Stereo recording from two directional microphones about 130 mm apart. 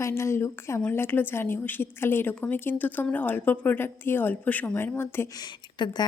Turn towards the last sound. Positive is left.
turn(degrees=35)  # may be behind; listen again after turning